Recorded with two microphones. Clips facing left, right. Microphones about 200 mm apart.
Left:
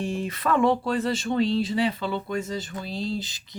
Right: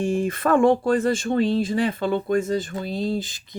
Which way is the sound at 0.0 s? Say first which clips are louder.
Right 6 dB; 50° right (ahead or behind).